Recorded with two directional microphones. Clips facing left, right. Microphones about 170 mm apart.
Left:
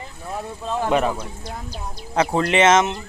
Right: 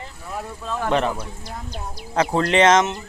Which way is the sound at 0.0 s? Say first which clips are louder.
Left 1 dB; 25° left (ahead or behind).